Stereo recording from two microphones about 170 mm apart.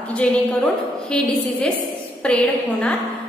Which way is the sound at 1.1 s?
5° left (ahead or behind).